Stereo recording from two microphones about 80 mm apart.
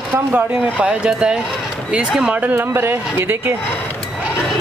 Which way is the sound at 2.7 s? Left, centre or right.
Right.